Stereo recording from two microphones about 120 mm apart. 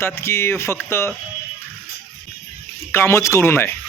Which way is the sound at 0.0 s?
20° left (ahead or behind).